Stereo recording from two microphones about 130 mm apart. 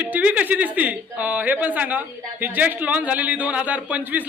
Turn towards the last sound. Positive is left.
turn(degrees=-10)  # may be behind; listen again after turning